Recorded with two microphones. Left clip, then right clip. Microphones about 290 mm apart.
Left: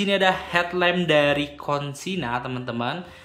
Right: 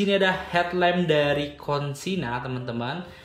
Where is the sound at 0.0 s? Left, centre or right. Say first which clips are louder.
Left 2 dB; centre.